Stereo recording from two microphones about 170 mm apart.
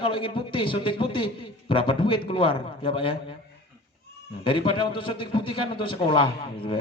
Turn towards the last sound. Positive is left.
turn(degrees=30)  # may be behind; listen again after turning